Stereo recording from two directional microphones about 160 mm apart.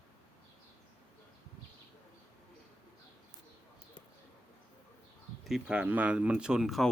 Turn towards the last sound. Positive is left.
turn(degrees=0)  # may be behind; listen again after turning